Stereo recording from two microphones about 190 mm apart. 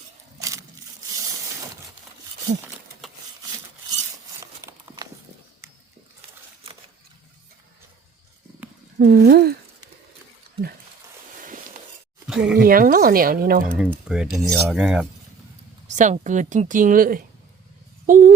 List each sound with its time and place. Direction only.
0.3 s a sound: 15° right (ahead or behind)
2.5 s a woman's voice: 40° right (ahead or behind)
4.4 s a sound: 15° right (ahead or behind)
9.0 s speech: 60° right (ahead or behind)
12.3 s speech: 5° right (ahead or behind)
12.5 s speech: 50° right (ahead or behind)
14.1 s cutlery: centre (ahead or behind)
15.9 s a woman's voice: 40° right (ahead or behind)
18.0 s a sound: 45° right (ahead or behind)